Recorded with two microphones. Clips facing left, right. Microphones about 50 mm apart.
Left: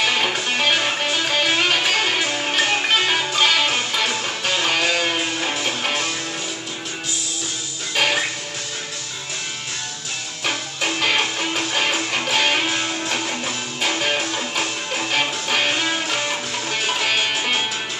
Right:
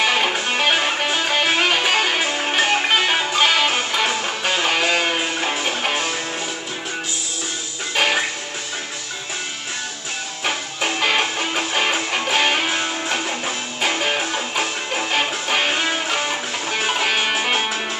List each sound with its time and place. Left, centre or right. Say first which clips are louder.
0.0 s music: right 2 dB; centre
7.9 s music: right 1 dB; centre
10.4 s music: right 1 dB; centre